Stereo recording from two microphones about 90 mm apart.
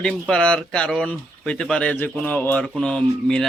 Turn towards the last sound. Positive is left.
turn(degrees=10)  # may be behind; listen again after turning